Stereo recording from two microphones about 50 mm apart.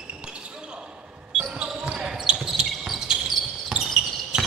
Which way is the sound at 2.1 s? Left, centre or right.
Centre.